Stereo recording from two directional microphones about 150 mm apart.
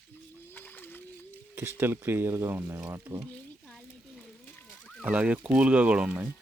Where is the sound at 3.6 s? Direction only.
5° left (ahead or behind).